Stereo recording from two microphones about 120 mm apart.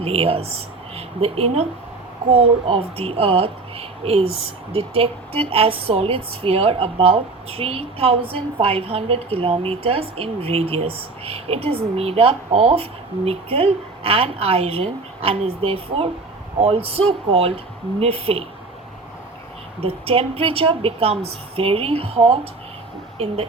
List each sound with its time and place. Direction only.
0.0 s speech: 55° right (ahead or behind)
19.8 s a woman's voice: 55° right (ahead or behind)